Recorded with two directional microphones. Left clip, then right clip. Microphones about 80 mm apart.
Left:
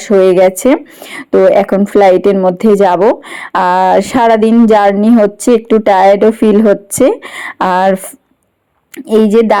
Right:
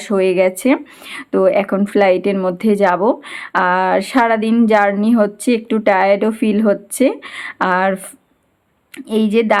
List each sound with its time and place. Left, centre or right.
0.0 s a woman's voice: left
2.0 s a woman's voice: left
3.6 s speech: centre
3.9 s a woman's voice: left
5.9 s speech: left
6.1 s a woman's voice: left
7.7 s a woman's voice: left
9.0 s a woman's voice: left